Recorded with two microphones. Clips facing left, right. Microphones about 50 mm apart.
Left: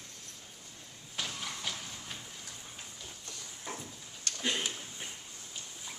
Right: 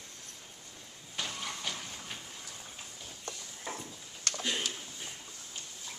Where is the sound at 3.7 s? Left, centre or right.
Centre.